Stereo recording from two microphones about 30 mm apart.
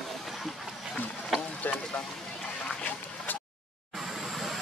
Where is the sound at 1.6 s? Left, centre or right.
Left.